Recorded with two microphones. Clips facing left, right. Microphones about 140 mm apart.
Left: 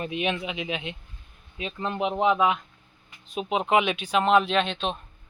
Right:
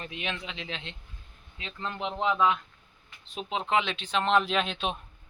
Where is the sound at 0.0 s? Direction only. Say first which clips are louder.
Left 8 dB; 20° left (ahead or behind); by 4.9 s 5° right (ahead or behind).